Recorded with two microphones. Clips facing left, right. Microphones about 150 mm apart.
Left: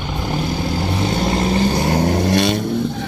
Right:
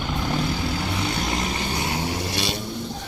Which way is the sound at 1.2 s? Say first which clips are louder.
Left 9 dB; 35° left (ahead or behind).